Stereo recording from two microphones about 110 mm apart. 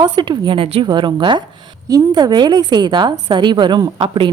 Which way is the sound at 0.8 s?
45° right (ahead or behind).